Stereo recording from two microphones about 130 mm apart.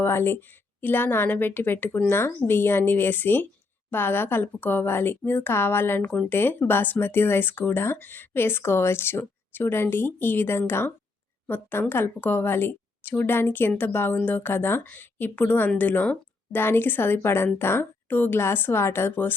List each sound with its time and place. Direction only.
0.0 s a woman's voice: 15° left (ahead or behind)